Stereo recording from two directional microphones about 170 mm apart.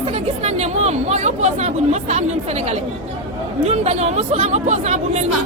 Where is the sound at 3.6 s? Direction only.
40° right (ahead or behind).